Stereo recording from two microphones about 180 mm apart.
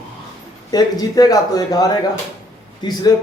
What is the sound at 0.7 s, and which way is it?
Speech, 20° left (ahead or behind).